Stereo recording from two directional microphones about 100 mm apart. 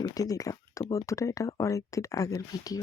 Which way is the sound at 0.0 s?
35° left (ahead or behind).